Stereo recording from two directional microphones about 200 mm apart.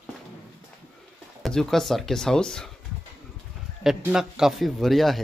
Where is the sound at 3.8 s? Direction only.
5° right (ahead or behind).